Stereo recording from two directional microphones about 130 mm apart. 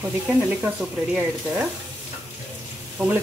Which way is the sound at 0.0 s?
10° right (ahead or behind).